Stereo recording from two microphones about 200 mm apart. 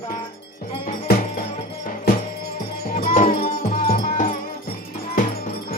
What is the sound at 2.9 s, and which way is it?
Music, 35° left (ahead or behind).